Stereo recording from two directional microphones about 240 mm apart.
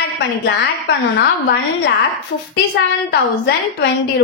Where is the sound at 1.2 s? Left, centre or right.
Left.